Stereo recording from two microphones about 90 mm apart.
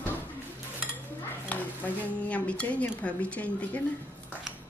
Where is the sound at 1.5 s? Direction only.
20° left (ahead or behind).